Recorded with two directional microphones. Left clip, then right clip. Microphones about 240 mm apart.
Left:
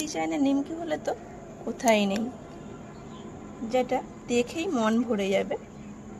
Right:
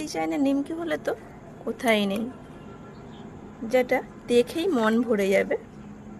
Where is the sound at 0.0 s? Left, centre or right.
Centre.